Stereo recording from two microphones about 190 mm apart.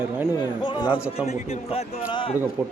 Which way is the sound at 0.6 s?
25° left (ahead or behind).